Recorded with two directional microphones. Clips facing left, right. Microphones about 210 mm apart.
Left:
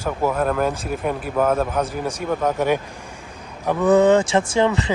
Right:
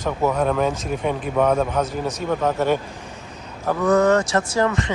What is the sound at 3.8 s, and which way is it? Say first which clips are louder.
Speech: left 3 dB; 30° left (ahead or behind).